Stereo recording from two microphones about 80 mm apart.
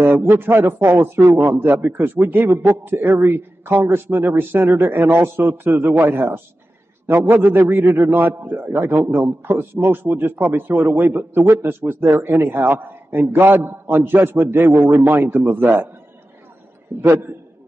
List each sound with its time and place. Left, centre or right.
0.0 s a man's voice: right
16.9 s a man's voice: right